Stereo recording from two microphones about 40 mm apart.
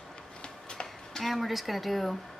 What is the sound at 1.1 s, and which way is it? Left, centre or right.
Speech, centre.